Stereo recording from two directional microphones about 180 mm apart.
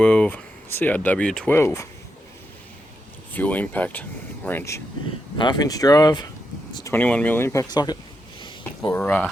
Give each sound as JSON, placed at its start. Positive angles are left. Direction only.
{"t": 0.0, "sound": "speech", "side_deg": 10}
{"t": 3.3, "sound": "speech", "side_deg": 10}
{"t": 8.4, "sound": "a sound", "side_deg": 25}
{"t": 9.0, "sound": "speech", "side_deg": 10}